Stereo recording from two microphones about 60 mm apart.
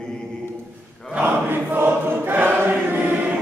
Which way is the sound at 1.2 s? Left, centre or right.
Right.